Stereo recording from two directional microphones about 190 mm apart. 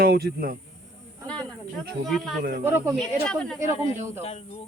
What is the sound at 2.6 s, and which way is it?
Speech, 10° right (ahead or behind).